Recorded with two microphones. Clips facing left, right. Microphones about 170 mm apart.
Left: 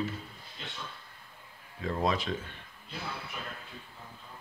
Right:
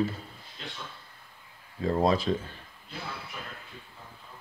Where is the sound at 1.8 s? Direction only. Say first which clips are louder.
Right 5 dB; 35° right (ahead or behind).